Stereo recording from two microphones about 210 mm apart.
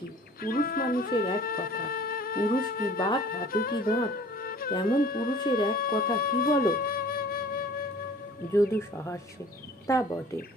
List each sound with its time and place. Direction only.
0.4 s music: 45° left (ahead or behind)
1.4 s speech: 45° left (ahead or behind)
3.2 s music: 45° left (ahead or behind)
5.7 s flute: 45° left (ahead or behind)
8.5 s speech: 10° left (ahead or behind)